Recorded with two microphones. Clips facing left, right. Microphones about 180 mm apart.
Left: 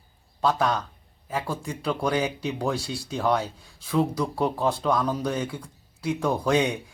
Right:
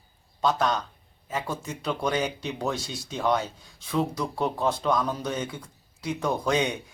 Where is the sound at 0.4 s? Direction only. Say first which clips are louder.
Left 1 dB; 5° left (ahead or behind).